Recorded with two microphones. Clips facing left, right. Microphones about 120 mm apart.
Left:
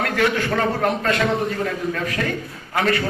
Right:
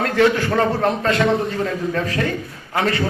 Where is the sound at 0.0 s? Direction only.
30° right (ahead or behind).